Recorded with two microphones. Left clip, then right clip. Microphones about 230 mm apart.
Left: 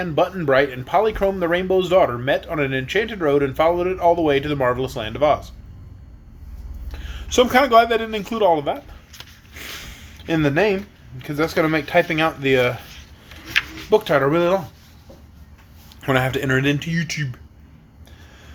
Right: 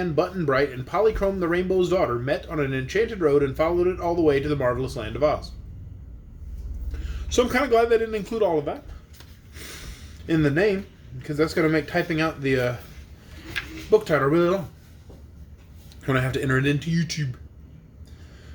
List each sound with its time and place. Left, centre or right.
0.0 s speech: centre
7.3 s speech: centre
10.2 s speech: centre
13.5 s a sound: left
14.1 s speech: centre
16.0 s speech: centre